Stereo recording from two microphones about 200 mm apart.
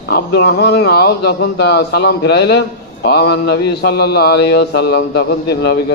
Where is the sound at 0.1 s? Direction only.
55° left (ahead or behind).